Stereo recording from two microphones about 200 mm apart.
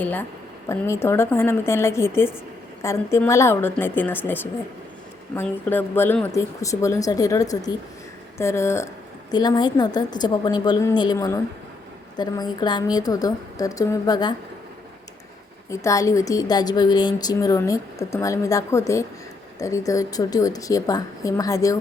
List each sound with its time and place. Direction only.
0.0 s a woman's voice: 10° left (ahead or behind)
15.7 s a woman's voice: 15° left (ahead or behind)